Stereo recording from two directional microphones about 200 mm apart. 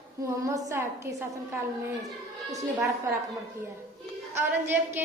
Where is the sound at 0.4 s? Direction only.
15° right (ahead or behind).